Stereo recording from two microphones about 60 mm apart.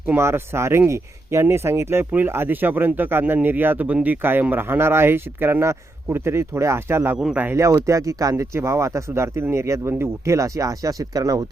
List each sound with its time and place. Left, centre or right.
0.2 s speech: right
7.5 s speech: right